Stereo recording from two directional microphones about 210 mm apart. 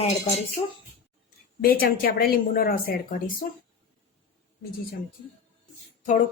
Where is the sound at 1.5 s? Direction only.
45° left (ahead or behind).